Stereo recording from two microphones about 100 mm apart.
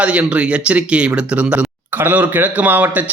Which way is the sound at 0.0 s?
10° right (ahead or behind).